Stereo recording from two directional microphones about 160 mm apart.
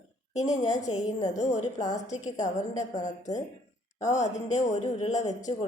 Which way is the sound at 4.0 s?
45° left (ahead or behind).